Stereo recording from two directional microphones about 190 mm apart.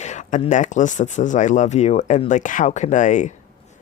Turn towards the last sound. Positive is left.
turn(degrees=40)  # may be behind; listen again after turning